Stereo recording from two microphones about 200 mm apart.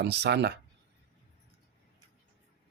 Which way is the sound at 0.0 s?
55° right (ahead or behind).